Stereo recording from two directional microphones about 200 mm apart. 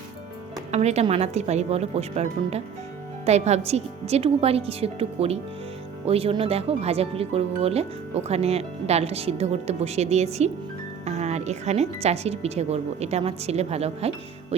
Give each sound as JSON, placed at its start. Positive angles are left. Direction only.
{"t": 0.7, "sound": "speech", "side_deg": -35}